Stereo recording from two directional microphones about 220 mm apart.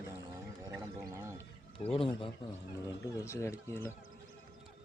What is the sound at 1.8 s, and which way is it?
Speech, 25° left (ahead or behind).